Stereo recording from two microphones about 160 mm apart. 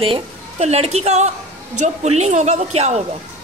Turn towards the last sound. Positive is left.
turn(degrees=-40)  # may be behind; listen again after turning